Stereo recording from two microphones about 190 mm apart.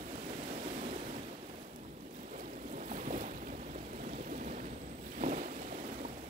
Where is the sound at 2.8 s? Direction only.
40° right (ahead or behind).